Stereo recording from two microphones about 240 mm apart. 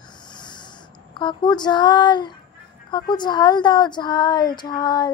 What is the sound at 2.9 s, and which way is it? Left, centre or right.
A woman's voice, centre.